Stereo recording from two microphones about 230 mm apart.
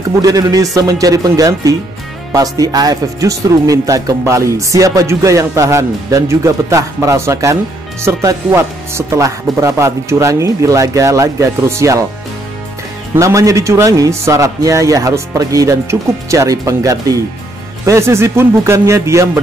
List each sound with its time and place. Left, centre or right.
0.2 s speech: centre
13.1 s speech: centre